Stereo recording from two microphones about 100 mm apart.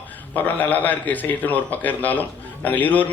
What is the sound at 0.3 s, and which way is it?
A man's voice, 20° left (ahead or behind).